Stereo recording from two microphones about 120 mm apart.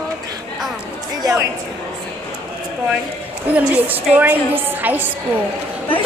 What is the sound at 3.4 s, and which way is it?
A woman's voice, 15° right (ahead or behind).